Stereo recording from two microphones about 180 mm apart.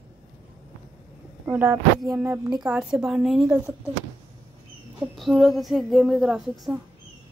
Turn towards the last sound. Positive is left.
turn(degrees=0)  # may be behind; listen again after turning